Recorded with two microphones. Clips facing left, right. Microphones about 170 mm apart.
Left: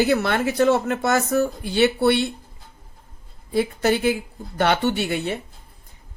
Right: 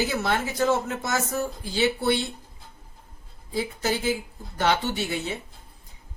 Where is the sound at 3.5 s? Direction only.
65° left (ahead or behind).